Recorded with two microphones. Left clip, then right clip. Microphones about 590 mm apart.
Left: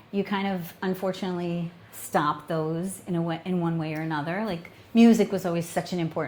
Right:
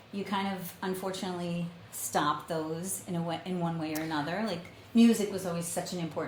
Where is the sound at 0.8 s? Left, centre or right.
Left.